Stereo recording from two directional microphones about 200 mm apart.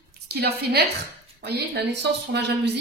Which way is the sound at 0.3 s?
55° right (ahead or behind).